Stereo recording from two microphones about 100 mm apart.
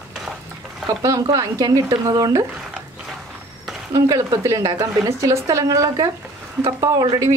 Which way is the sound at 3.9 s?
35° right (ahead or behind).